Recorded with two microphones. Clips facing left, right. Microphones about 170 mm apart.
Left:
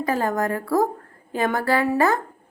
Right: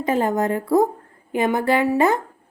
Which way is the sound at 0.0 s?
20° right (ahead or behind).